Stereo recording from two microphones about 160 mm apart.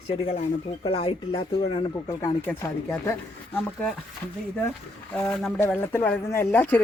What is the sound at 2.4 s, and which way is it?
Speech, 10° left (ahead or behind).